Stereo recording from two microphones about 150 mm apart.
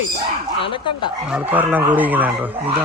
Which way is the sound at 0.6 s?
35° left (ahead or behind).